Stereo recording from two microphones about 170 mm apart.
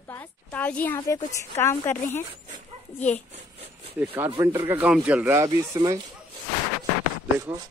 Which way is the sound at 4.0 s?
10° right (ahead or behind).